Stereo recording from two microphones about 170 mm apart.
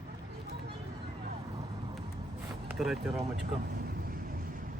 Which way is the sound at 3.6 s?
65° right (ahead or behind).